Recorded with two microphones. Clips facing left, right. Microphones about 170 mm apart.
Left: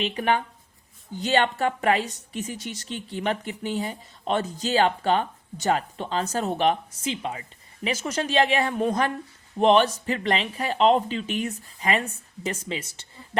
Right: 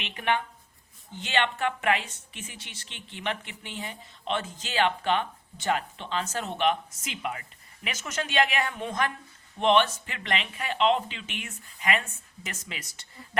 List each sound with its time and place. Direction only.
0.0 s speech: 35° left (ahead or behind)